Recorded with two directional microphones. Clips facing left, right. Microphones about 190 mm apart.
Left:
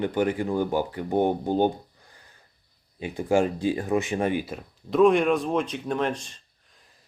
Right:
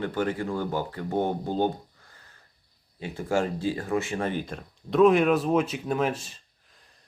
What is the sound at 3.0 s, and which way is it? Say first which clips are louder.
Speech: left 4 dB; 15° left (ahead or behind).